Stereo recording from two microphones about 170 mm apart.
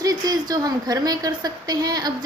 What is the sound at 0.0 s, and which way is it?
A woman's voice, 20° right (ahead or behind).